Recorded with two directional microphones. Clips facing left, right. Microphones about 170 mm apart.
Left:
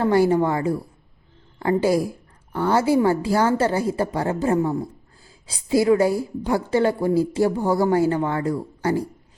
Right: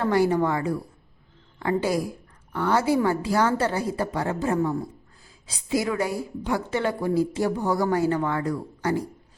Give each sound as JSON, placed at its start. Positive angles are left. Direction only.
{"t": 0.0, "sound": "a woman's voice", "side_deg": 30}